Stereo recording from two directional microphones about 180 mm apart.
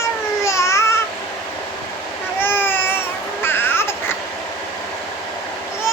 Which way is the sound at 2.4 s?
10° left (ahead or behind).